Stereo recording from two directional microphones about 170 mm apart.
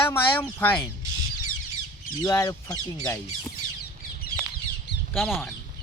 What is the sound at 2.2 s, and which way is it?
Speech, 20° left (ahead or behind).